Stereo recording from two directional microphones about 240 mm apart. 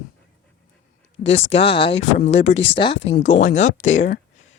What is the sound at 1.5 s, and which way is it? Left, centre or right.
Speech, left.